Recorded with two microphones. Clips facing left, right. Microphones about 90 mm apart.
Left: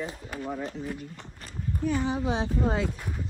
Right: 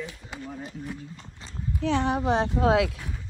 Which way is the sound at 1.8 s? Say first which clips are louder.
Right 3 dB; 75° right (ahead or behind).